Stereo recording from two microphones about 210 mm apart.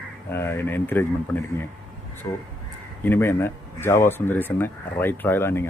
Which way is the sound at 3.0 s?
10° left (ahead or behind).